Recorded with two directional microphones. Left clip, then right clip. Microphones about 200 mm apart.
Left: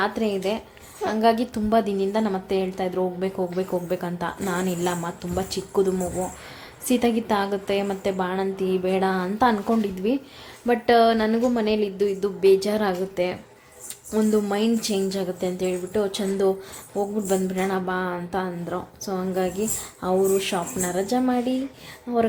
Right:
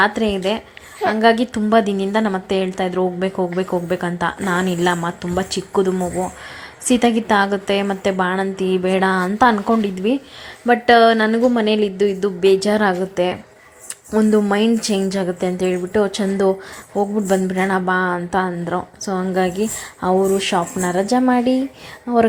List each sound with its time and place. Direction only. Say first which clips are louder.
0.0 s a woman's voice: right 7 dB; 15° right (ahead or behind)